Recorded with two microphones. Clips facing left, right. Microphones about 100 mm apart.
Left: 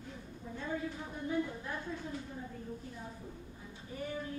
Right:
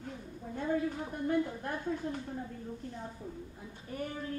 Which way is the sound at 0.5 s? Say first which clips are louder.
Right 6 dB; 55° right (ahead or behind).